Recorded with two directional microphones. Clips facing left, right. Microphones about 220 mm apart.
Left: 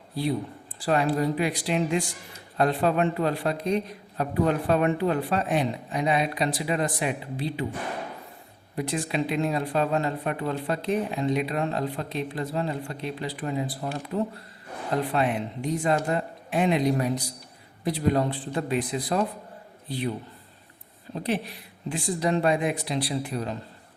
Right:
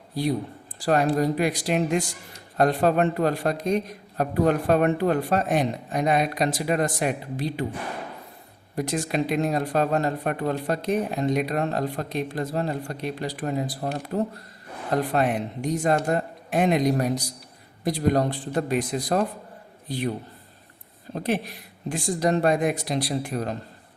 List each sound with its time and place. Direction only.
0.9 s speech: 45° right (ahead or behind)
8.7 s speech: 45° right (ahead or behind)
21.1 s speech: 45° right (ahead or behind)